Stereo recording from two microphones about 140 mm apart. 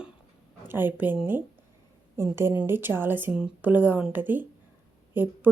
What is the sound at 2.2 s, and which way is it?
Speech, 20° right (ahead or behind).